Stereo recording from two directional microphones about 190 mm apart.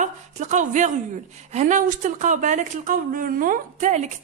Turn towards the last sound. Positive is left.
turn(degrees=-40)  # may be behind; listen again after turning